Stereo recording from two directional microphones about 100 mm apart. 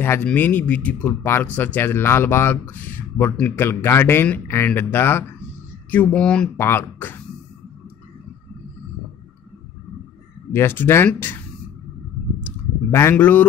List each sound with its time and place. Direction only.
0.0 s speech: 20° left (ahead or behind)
6.5 s speech: 25° left (ahead or behind)
10.5 s speech: 25° left (ahead or behind)
13.1 s speech: 15° left (ahead or behind)